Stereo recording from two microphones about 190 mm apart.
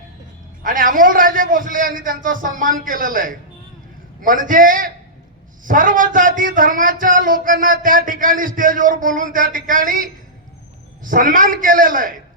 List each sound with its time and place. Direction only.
0.6 s speech: 45° right (ahead or behind)